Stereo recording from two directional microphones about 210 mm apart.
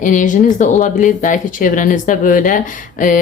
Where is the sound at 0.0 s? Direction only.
40° left (ahead or behind).